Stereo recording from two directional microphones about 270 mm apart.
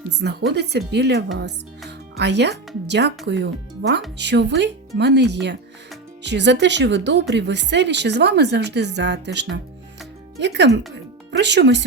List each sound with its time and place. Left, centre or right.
0.2 s speech: right